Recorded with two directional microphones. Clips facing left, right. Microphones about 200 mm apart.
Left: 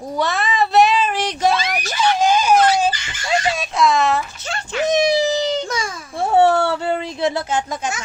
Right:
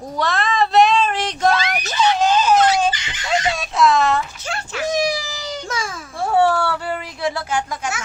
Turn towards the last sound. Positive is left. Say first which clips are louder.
# left 1 dB
turn(degrees=20)  # may be behind; listen again after turning